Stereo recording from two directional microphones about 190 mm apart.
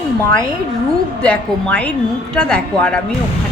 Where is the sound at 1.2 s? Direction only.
5° left (ahead or behind).